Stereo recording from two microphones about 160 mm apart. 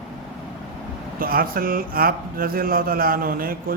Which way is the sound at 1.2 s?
65° right (ahead or behind).